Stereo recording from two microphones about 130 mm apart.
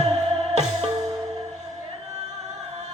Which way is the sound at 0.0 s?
50° right (ahead or behind).